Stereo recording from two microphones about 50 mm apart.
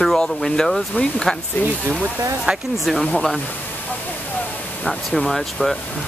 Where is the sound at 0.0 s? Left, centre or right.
Centre.